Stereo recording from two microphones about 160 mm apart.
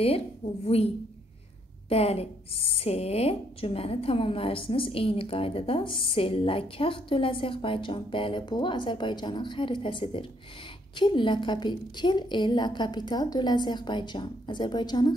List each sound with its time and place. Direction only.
1.9 s a woman's voice: 40° left (ahead or behind)